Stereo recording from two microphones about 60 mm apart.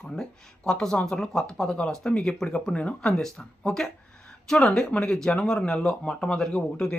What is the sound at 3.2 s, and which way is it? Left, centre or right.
Speech, centre.